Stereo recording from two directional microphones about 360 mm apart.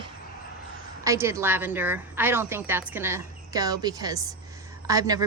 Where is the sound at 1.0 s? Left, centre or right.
Centre.